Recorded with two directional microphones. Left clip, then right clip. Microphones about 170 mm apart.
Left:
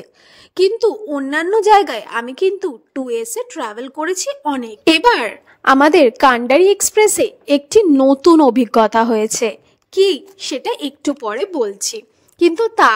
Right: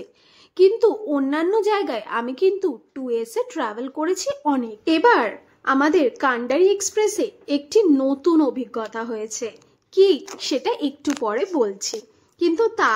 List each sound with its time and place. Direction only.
0.6 s a woman's voice: 45° left (ahead or behind)